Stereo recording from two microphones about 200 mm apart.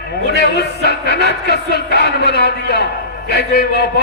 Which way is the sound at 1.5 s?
55° left (ahead or behind).